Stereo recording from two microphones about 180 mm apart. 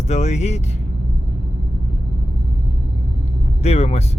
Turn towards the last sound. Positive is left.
turn(degrees=35)  # may be behind; listen again after turning